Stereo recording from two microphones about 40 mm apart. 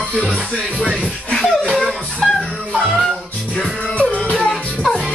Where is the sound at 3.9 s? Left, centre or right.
Left.